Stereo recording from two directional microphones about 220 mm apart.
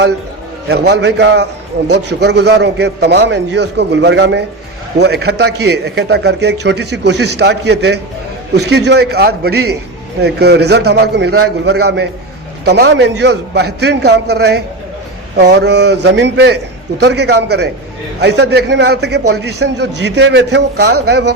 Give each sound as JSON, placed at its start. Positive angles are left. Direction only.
{"t": 0.7, "sound": "a man's voice", "side_deg": -50}